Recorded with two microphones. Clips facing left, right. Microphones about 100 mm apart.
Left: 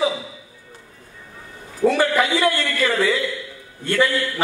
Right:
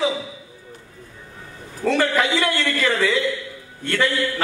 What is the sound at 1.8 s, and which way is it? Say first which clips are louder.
Speech: left 2 dB; 10° left (ahead or behind).